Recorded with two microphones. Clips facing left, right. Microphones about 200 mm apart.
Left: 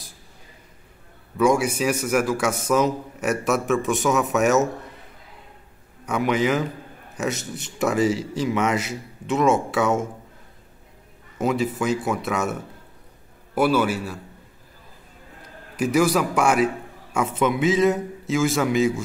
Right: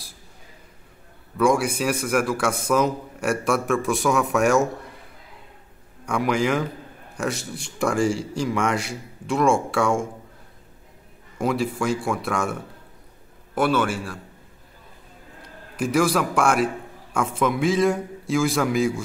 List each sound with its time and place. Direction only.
1.4 s speech: centre (ahead or behind)
6.0 s speech: 5° left (ahead or behind)
7.3 s speech: 30° right (ahead or behind)
7.8 s speech: 5° left (ahead or behind)
11.3 s a man's voice: 5° left (ahead or behind)
15.8 s speech: 5° left (ahead or behind)